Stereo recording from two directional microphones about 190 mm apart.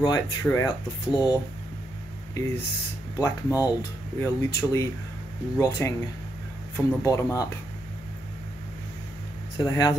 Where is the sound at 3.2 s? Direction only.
15° left (ahead or behind).